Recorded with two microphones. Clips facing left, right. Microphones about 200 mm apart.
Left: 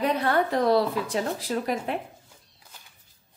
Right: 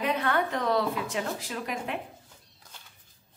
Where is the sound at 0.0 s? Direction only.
35° left (ahead or behind).